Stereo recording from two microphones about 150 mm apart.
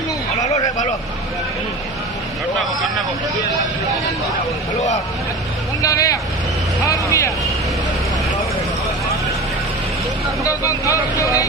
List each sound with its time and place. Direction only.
0.4 s a sound: 50° left (ahead or behind)
5.8 s speech: 20° left (ahead or behind)
10.4 s speech: 20° left (ahead or behind)